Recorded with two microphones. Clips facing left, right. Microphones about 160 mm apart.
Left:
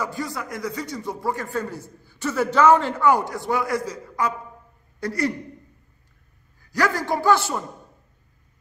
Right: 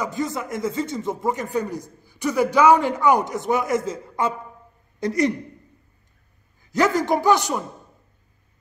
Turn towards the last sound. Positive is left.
turn(degrees=-15)  # may be behind; listen again after turning